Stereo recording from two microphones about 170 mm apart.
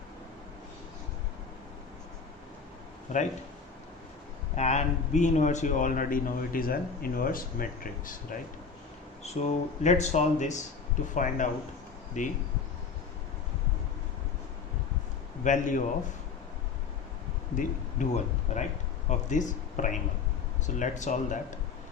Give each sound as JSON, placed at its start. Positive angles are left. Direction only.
{"t": 3.1, "sound": "speech", "side_deg": 45}
{"t": 4.5, "sound": "speech", "side_deg": 40}
{"t": 9.2, "sound": "speech", "side_deg": 40}
{"t": 15.4, "sound": "speech", "side_deg": 50}
{"t": 17.6, "sound": "speech", "side_deg": 45}